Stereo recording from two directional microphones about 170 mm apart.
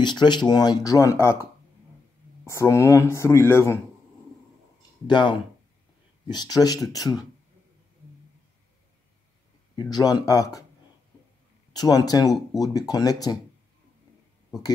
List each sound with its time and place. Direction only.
0.0 s speech: 25° left (ahead or behind)
5.0 s speech: 25° left (ahead or behind)
9.8 s speech: 25° left (ahead or behind)
11.7 s speech: 20° left (ahead or behind)